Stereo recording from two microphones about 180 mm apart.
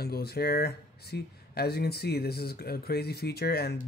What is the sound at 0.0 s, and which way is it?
Speech, 60° left (ahead or behind).